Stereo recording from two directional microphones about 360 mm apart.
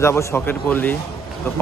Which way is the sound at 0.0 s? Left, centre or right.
Centre.